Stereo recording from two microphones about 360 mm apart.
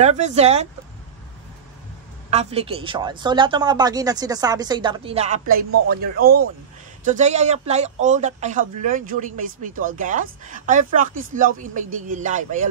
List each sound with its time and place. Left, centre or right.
0.0 s speech: centre
2.3 s speech: centre